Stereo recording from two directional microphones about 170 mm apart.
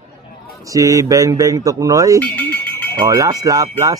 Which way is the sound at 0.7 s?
20° right (ahead or behind).